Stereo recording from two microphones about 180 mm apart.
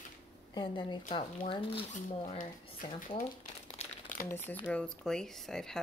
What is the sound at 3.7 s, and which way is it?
Crumpling, 40° left (ahead or behind).